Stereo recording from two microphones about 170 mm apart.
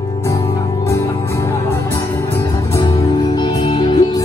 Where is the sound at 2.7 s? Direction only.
20° left (ahead or behind).